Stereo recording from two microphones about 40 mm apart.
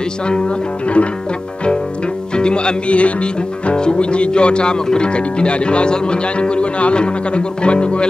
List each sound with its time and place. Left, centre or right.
0.3 s speech: left
2.3 s speech: left